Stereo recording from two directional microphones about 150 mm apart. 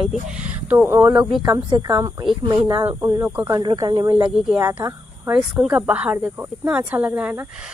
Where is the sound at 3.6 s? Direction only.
30° right (ahead or behind).